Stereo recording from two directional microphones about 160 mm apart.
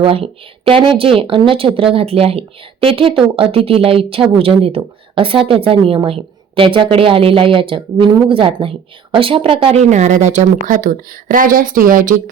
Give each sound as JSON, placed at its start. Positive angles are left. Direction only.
{"t": 0.0, "sound": "speech", "side_deg": -35}